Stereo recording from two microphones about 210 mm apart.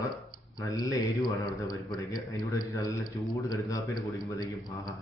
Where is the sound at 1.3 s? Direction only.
15° left (ahead or behind).